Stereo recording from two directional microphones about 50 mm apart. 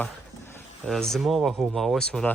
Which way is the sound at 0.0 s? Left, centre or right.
Left.